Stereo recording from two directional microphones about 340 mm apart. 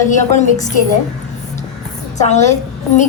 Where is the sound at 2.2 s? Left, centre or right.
Centre.